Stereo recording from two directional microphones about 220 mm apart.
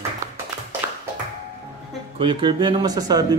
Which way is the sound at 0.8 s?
10° right (ahead or behind).